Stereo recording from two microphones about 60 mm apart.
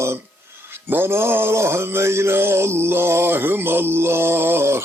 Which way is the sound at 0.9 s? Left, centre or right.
Right.